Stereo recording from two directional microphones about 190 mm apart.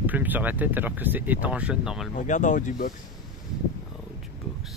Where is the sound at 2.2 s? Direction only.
40° left (ahead or behind).